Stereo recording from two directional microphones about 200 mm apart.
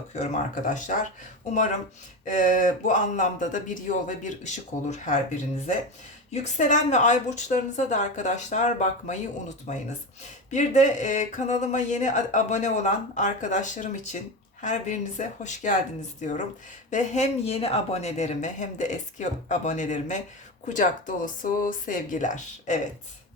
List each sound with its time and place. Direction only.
0.1 s speech: 40° left (ahead or behind)
2.2 s speech: 40° left (ahead or behind)
6.3 s speech: 35° left (ahead or behind)